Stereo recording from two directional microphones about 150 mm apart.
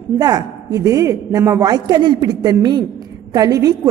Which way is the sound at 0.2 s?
25° right (ahead or behind).